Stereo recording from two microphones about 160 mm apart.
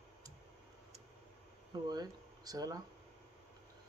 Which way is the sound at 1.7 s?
25° right (ahead or behind).